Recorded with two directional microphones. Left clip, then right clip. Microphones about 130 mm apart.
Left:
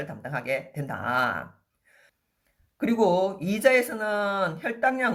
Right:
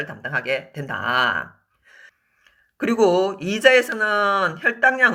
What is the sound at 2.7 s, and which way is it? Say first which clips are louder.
Speech: right 5 dB; 35° right (ahead or behind).